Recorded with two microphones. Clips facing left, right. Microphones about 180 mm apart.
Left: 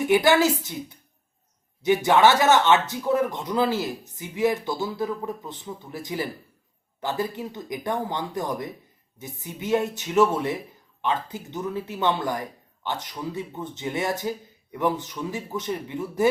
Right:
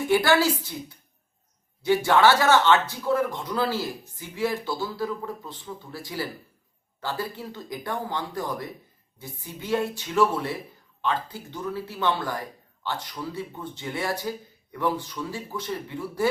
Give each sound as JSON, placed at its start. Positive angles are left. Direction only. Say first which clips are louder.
{"t": 0.0, "sound": "a man's voice", "louder": "left 2 dB", "side_deg": 20}